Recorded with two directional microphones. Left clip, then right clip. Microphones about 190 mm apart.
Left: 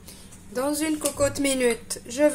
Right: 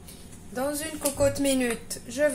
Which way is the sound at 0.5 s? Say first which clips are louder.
Left 4 dB; 55° left (ahead or behind).